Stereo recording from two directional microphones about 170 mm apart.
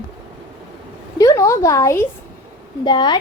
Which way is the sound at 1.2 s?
20° left (ahead or behind).